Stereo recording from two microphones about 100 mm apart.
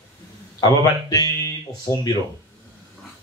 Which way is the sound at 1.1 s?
40° left (ahead or behind).